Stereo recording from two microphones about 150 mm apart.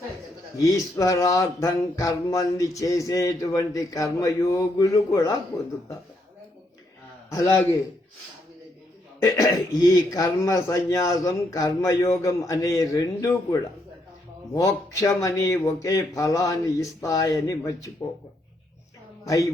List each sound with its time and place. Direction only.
0.5 s speech: 20° left (ahead or behind)
7.3 s a man's voice: 20° left (ahead or behind)
9.2 s speech: 20° left (ahead or behind)
19.2 s speech: 20° left (ahead or behind)